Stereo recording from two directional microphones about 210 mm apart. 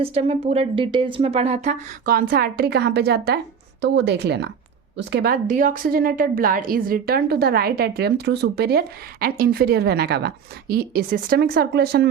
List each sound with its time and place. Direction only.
0.0 s a woman's voice: 25° right (ahead or behind)
2.0 s a woman's voice: 45° right (ahead or behind)